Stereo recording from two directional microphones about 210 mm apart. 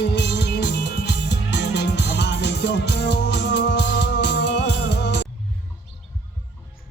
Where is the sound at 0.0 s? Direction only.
55° left (ahead or behind).